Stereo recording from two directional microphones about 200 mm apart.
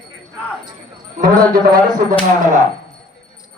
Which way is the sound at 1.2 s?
45° right (ahead or behind).